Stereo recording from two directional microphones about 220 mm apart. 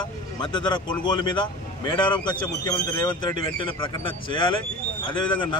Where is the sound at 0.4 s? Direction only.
20° left (ahead or behind).